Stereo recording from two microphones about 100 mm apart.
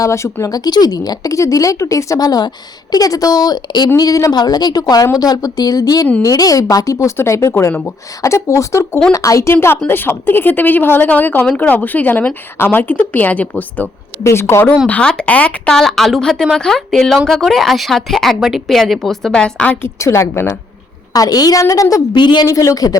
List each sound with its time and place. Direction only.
0.0 s a woman's voice: 30° left (ahead or behind)
14.3 s a woman's voice: 25° left (ahead or behind)
14.8 s a woman's voice: 10° left (ahead or behind)
20.0 s a woman's voice: 30° left (ahead or behind)
21.1 s speech: 40° left (ahead or behind)
22.2 s speech: 50° left (ahead or behind)
22.4 s speech: 35° left (ahead or behind)